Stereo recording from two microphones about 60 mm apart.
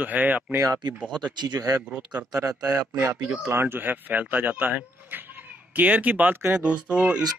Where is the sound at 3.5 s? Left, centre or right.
Right.